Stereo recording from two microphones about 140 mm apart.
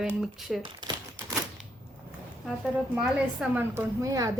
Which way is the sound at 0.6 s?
30° right (ahead or behind).